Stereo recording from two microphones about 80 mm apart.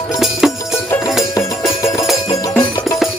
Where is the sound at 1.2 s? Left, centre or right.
Left.